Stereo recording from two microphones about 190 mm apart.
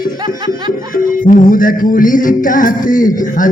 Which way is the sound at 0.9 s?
45° left (ahead or behind).